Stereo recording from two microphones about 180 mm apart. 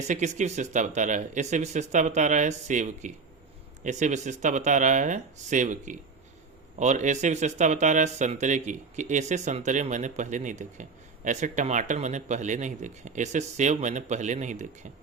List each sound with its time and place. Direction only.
0.0 s speech: 40° right (ahead or behind)